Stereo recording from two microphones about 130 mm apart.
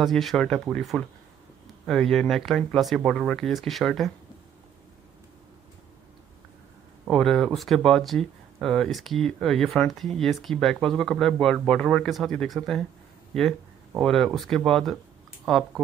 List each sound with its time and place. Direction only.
0.0 s speech: centre (ahead or behind)
7.1 s speech: 5° left (ahead or behind)